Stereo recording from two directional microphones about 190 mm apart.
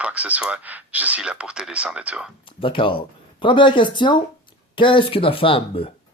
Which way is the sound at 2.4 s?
25° left (ahead or behind).